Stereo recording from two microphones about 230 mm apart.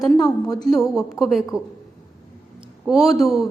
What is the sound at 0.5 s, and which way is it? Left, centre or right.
Speech, centre.